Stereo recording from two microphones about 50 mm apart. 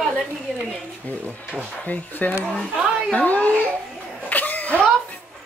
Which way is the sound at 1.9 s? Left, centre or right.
Left.